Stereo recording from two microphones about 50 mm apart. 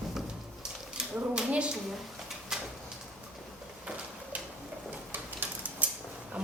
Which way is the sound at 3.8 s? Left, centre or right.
Right.